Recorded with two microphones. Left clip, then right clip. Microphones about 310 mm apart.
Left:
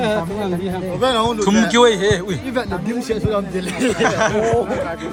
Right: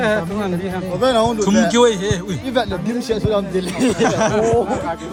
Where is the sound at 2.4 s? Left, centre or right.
Right.